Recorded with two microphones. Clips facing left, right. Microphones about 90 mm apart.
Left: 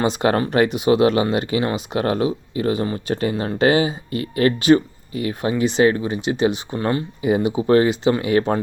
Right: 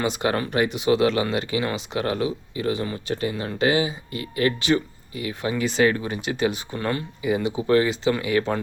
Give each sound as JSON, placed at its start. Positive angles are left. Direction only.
{"t": 0.0, "sound": "speech", "side_deg": 30}
{"t": 1.3, "sound": "speech", "side_deg": 25}
{"t": 3.2, "sound": "speech", "side_deg": 40}
{"t": 5.5, "sound": "speech", "side_deg": 25}